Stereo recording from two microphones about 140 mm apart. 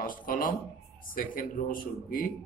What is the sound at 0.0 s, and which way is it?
Speech, 80° left.